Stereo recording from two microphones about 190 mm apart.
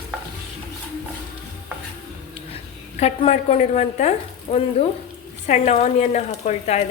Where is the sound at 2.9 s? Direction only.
35° left (ahead or behind).